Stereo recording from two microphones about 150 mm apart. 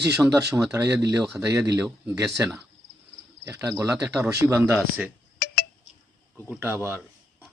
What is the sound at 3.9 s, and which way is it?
Speech, 5° right (ahead or behind).